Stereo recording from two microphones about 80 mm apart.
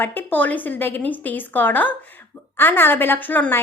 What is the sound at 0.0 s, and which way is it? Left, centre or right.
A woman's voice, left.